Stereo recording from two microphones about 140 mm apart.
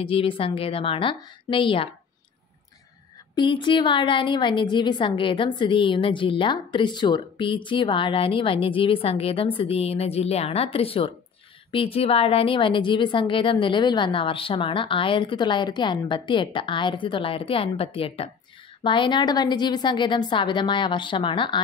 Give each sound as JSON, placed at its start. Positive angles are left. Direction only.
{"t": 0.0, "sound": "a woman's voice", "side_deg": 40}
{"t": 3.3, "sound": "a woman's voice", "side_deg": 35}